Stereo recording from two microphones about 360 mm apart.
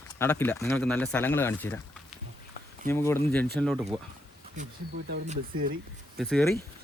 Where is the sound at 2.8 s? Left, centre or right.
Centre.